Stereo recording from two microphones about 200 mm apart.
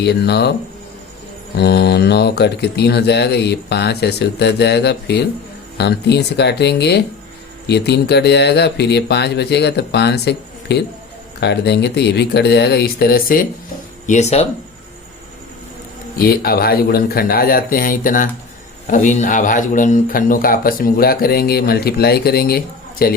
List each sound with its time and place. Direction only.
0.0 s speech: 55° left (ahead or behind)
1.5 s speech: 55° left (ahead or behind)
14.1 s speech: 35° left (ahead or behind)
16.1 s a man's voice: 50° left (ahead or behind)